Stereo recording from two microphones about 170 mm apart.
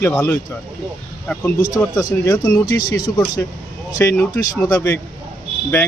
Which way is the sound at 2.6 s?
55° left (ahead or behind).